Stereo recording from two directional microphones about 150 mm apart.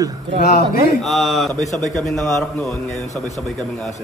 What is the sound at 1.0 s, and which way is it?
Speech, centre (ahead or behind).